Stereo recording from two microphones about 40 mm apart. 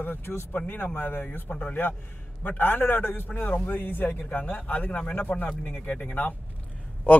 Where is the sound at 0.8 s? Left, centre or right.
Left.